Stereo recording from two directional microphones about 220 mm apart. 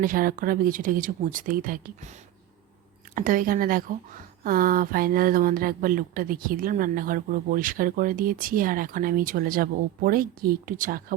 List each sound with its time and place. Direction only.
0.0 s speech: 40° right (ahead or behind)